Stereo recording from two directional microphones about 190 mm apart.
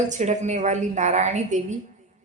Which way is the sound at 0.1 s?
35° right (ahead or behind).